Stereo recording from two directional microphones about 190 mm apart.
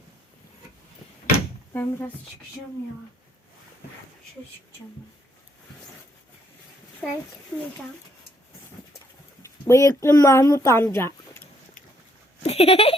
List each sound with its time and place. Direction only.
1.7 s speech: 10° left (ahead or behind)
7.0 s a child's voice: 5° left (ahead or behind)
9.4 s a sound: 15° left (ahead or behind)
10.0 s speech: 15° left (ahead or behind)
12.4 s speech: 30° left (ahead or behind)